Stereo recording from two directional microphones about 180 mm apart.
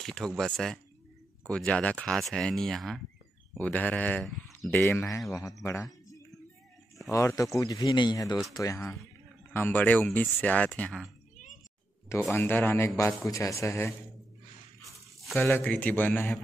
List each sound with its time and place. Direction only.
0.0 s a man's voice: 5° left (ahead or behind)
4.6 s a man's voice: 10° left (ahead or behind)
7.1 s a man's voice: 15° left (ahead or behind)
12.3 s a man's voice: 10° left (ahead or behind)
15.3 s a man's voice: 10° left (ahead or behind)